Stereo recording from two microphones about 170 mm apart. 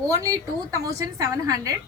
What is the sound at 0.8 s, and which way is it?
Speech, 20° right (ahead or behind).